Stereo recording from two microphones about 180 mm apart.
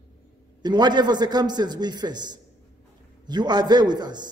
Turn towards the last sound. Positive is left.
turn(degrees=-25)  # may be behind; listen again after turning